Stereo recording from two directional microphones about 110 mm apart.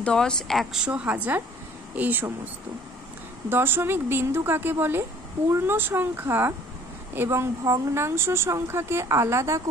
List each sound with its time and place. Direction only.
0.0 s speech: 5° left (ahead or behind)
0.8 s a woman's voice: 10° right (ahead or behind)
3.4 s speech: 20° right (ahead or behind)